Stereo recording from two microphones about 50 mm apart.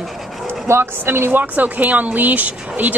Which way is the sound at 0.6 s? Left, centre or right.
Right.